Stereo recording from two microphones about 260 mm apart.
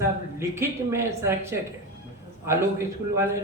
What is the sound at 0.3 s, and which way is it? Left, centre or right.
A man's voice, centre.